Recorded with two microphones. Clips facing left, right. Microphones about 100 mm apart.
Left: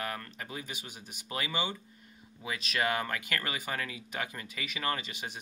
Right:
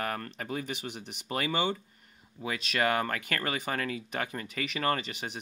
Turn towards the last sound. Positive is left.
turn(degrees=-45)  # may be behind; listen again after turning